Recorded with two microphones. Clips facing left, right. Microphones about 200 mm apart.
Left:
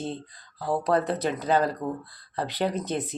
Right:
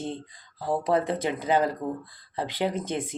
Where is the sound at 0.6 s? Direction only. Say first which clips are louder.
Even; 15° right (ahead or behind).